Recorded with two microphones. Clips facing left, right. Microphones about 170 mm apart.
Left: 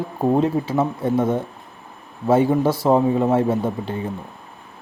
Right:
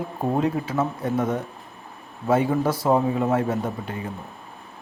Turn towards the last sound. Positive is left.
turn(degrees=30)  # may be behind; listen again after turning